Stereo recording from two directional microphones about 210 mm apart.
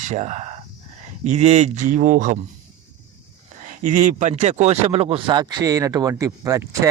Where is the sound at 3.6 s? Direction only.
35° right (ahead or behind); by 6.8 s 15° right (ahead or behind).